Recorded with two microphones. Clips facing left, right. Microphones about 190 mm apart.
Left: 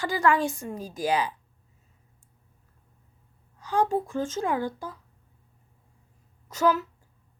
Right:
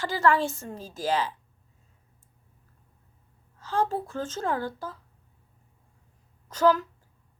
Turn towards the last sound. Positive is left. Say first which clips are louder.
# right 2 dB
turn(degrees=10)  # may be behind; listen again after turning